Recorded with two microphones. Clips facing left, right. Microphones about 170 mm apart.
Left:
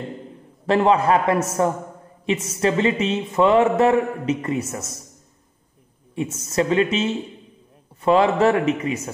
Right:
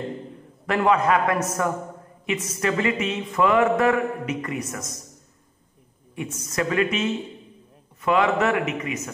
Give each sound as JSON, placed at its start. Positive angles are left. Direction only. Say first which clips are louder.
{"t": 0.7, "sound": "a woman's voice", "louder": "left 3 dB", "side_deg": 30}
{"t": 6.3, "sound": "a man's voice", "louder": "left 4 dB", "side_deg": 25}